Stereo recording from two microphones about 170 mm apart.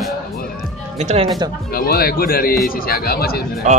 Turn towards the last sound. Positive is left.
turn(degrees=65)  # may be behind; listen again after turning